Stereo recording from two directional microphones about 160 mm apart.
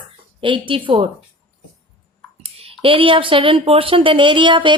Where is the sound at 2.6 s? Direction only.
35° right (ahead or behind).